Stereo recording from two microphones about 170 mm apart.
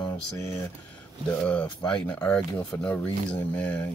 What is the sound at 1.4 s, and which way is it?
Speech, 10° left (ahead or behind).